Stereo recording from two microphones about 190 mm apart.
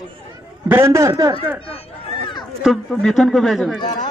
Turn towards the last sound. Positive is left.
turn(degrees=20)  # may be behind; listen again after turning